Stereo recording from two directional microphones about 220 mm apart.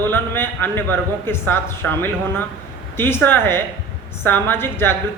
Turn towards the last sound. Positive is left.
turn(degrees=10)  # may be behind; listen again after turning